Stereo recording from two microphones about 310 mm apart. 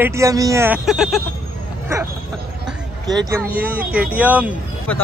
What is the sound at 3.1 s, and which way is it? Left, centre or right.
Speech, centre.